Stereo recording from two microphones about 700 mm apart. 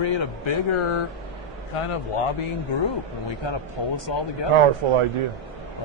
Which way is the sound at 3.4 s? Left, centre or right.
Left.